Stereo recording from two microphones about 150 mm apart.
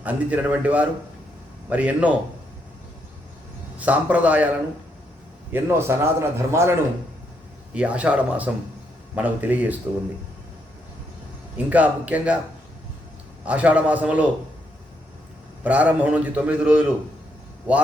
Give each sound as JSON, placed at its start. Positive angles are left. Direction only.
{"t": 0.0, "sound": "a man's voice", "side_deg": -10}
{"t": 3.8, "sound": "a man's voice", "side_deg": -10}
{"t": 5.5, "sound": "a man's voice", "side_deg": -15}
{"t": 7.7, "sound": "a man's voice", "side_deg": -10}
{"t": 11.5, "sound": "a man's voice", "side_deg": -10}
{"t": 13.4, "sound": "a man's voice", "side_deg": -10}
{"t": 15.6, "sound": "a man's voice", "side_deg": -10}